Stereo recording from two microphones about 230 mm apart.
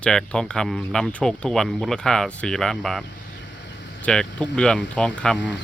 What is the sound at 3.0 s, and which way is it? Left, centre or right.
Vehicle, left.